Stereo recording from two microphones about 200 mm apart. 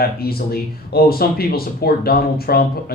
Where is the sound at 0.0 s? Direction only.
50° left (ahead or behind).